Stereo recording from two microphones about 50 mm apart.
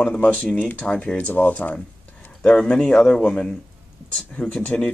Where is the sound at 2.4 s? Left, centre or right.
Left.